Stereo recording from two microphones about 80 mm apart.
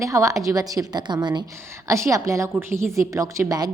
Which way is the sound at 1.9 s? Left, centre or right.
Right.